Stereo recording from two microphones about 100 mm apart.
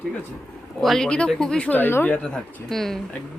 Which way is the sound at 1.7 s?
20° left (ahead or behind).